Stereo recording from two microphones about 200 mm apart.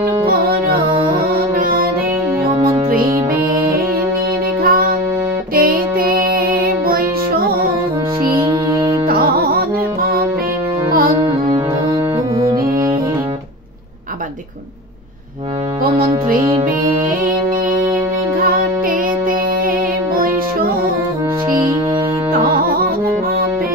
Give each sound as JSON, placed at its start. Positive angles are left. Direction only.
{"t": 0.3, "sound": "music", "side_deg": -50}
{"t": 4.6, "sound": "music", "side_deg": -45}
{"t": 9.0, "sound": "music", "side_deg": -50}
{"t": 12.4, "sound": "music", "side_deg": -15}
{"t": 22.4, "sound": "music", "side_deg": -50}